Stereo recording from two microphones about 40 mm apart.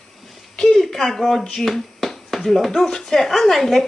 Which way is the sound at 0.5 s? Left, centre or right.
Centre.